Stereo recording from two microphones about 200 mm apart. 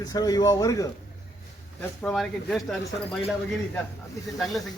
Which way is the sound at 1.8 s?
5° left (ahead or behind).